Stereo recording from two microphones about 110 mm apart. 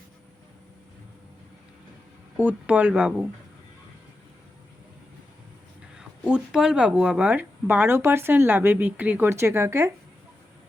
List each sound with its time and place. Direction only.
2.4 s speech: 15° right (ahead or behind)
6.0 s speech: 5° right (ahead or behind); by 9.9 s 25° right (ahead or behind)